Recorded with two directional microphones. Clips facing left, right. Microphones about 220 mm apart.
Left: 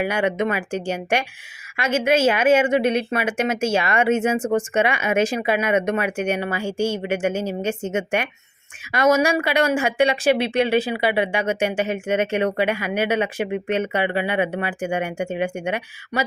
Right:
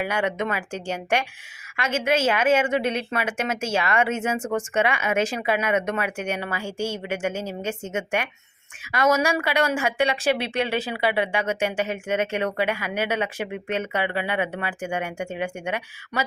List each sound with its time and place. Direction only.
0.0 s speech: 15° left (ahead or behind)